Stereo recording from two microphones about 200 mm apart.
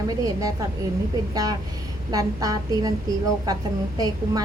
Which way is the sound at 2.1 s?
20° right (ahead or behind).